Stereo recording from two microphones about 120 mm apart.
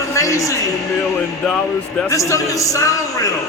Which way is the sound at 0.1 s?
25° left (ahead or behind).